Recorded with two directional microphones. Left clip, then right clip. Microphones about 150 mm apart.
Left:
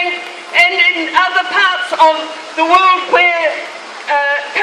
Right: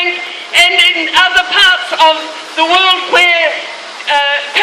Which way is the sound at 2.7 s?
25° right (ahead or behind).